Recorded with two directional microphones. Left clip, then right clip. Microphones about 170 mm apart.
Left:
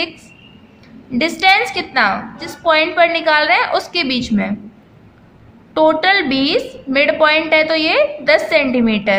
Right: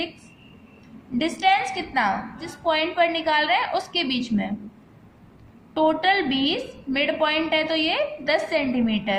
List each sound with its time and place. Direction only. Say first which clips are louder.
1.2 s a woman's voice: left 8 dB; 30° left (ahead or behind)
5.7 s a woman's voice: left 8 dB; 30° left (ahead or behind)